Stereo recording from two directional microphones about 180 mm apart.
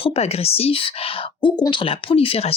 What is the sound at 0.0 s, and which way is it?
Speech, 35° left (ahead or behind).